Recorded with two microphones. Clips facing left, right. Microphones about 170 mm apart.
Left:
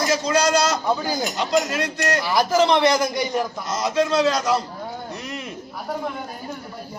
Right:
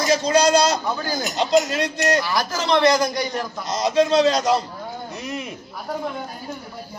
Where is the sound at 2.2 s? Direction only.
20° left (ahead or behind).